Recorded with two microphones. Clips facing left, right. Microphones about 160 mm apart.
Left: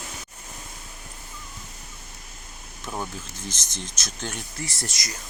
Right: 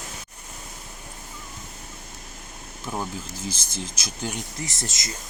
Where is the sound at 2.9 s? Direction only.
5° right (ahead or behind).